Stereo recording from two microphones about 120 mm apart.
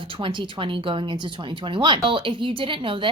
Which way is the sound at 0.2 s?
45° right (ahead or behind).